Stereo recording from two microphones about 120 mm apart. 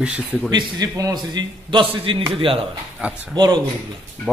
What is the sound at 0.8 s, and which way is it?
Speech, 30° right (ahead or behind).